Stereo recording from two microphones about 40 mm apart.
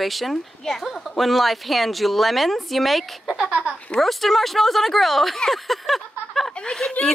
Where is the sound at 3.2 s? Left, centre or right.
Centre.